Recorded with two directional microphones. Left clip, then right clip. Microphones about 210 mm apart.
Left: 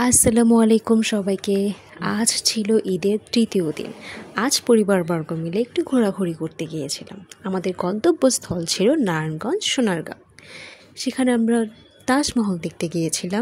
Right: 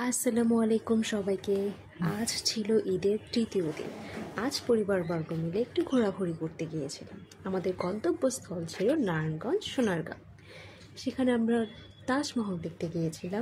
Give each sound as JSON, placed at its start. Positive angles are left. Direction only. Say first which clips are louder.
{"t": 0.0, "sound": "a woman's voice", "louder": "left 11 dB", "side_deg": 40}